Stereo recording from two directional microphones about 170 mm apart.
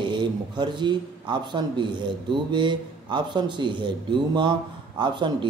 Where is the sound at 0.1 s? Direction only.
25° right (ahead or behind).